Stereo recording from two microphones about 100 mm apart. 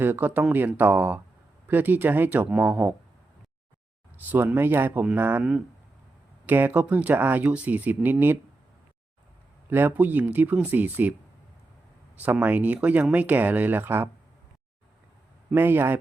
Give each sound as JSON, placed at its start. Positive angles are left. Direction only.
{"t": 0.0, "sound": "speech", "side_deg": -20}
{"t": 2.5, "sound": "speech", "side_deg": -10}
{"t": 4.3, "sound": "speech", "side_deg": -20}
{"t": 5.4, "sound": "speech", "side_deg": -5}
{"t": 6.4, "sound": "speech", "side_deg": -20}
{"t": 9.6, "sound": "speech", "side_deg": -20}
{"t": 12.2, "sound": "speech", "side_deg": -15}
{"t": 15.4, "sound": "speech", "side_deg": -20}